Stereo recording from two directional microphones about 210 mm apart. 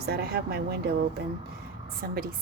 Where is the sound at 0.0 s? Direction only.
50° right (ahead or behind).